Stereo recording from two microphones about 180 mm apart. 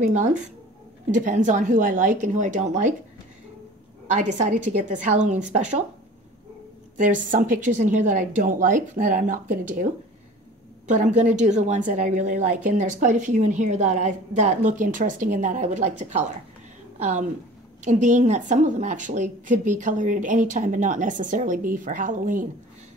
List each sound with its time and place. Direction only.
0.0 s a woman's voice: 40° right (ahead or behind)
4.1 s a woman's voice: 40° right (ahead or behind)
7.0 s a woman's voice: 45° right (ahead or behind)
10.9 s a woman's voice: 40° right (ahead or behind)